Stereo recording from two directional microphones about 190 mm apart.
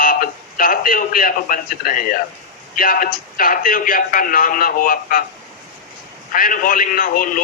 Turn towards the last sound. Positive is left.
turn(degrees=45)  # may be behind; listen again after turning